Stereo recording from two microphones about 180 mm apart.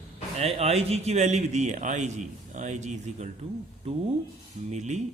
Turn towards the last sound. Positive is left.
turn(degrees=-40)  # may be behind; listen again after turning